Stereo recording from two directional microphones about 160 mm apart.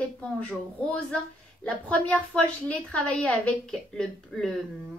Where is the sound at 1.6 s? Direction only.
10° left (ahead or behind).